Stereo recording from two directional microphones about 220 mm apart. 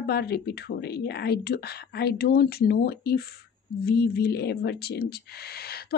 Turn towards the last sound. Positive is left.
turn(degrees=45)  # may be behind; listen again after turning